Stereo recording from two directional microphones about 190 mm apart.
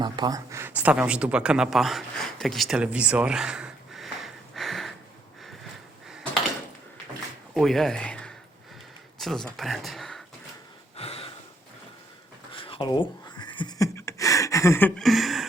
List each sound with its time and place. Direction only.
0.0 s speech: 20° right (ahead or behind); by 4.9 s centre (ahead or behind)
7.5 s speech: centre (ahead or behind)
10.9 s gasp: 30° left (ahead or behind)
12.6 s a sound: 25° left (ahead or behind); by 15.4 s centre (ahead or behind)